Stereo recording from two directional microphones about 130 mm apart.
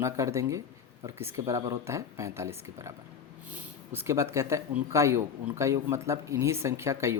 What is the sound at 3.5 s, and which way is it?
Speech, 15° right (ahead or behind).